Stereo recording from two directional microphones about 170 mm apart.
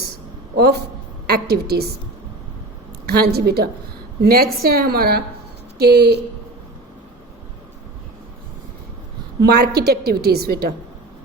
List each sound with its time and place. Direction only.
1.3 s a woman's voice: 70° right (ahead or behind)
3.1 s a woman's voice: 65° right (ahead or behind)
9.4 s a woman's voice: 70° right (ahead or behind)